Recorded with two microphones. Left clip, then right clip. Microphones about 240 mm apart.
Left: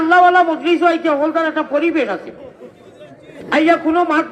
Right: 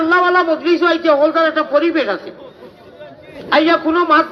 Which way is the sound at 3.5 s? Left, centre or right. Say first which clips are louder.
Right 1 dB; left.